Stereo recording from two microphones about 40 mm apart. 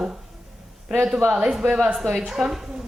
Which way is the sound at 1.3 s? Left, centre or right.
Right.